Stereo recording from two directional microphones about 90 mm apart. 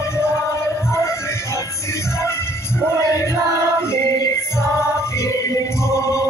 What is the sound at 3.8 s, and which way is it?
Music, 30° left (ahead or behind).